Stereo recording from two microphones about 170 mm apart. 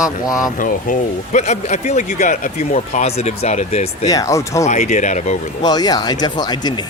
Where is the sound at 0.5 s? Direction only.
50° left (ahead or behind).